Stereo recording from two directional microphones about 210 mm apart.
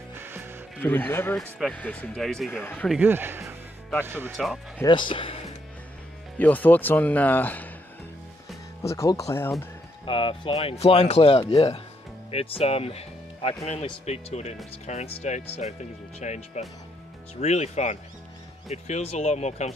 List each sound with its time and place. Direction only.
0.2 s music: 10° right (ahead or behind)
0.7 s speech: 10° left (ahead or behind)
2.9 s a man's voice: 10° right (ahead or behind)
4.8 s speech: 20° left (ahead or behind)
6.3 s speech: 10° left (ahead or behind)
8.8 s speech: 15° left (ahead or behind)
10.0 s speech: 25° left (ahead or behind)